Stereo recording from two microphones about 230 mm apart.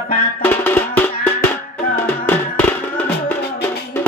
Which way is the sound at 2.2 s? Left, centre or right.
Centre.